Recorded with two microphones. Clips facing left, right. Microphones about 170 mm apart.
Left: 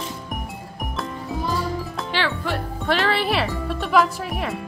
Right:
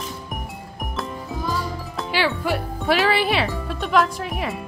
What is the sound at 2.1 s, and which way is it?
Speech, 10° right (ahead or behind).